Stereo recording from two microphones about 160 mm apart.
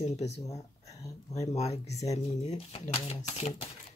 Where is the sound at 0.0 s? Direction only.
45° left (ahead or behind).